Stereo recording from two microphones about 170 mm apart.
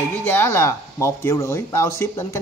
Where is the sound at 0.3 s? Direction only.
15° left (ahead or behind).